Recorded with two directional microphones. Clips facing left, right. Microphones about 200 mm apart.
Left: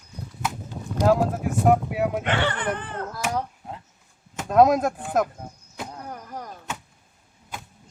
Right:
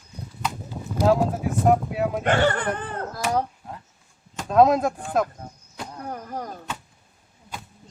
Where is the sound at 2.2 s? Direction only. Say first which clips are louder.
Right 4 dB; 45° right (ahead or behind).